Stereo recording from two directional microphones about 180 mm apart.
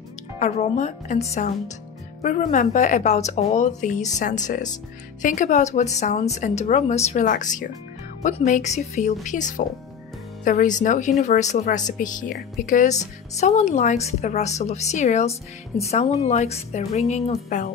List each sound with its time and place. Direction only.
0.4 s a woman's voice: 40° left (ahead or behind)
2.2 s a woman's voice: 40° left (ahead or behind)